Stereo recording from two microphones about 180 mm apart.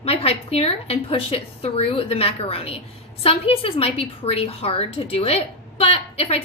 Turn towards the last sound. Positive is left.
turn(degrees=35)  # may be behind; listen again after turning